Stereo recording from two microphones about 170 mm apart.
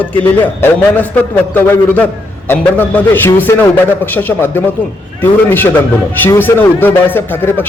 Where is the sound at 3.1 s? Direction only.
15° left (ahead or behind).